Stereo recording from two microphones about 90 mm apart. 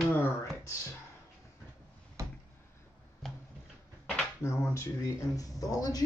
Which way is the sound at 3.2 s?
5° left (ahead or behind).